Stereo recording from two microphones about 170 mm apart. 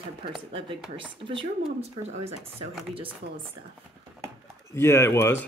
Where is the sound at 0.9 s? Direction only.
30° right (ahead or behind).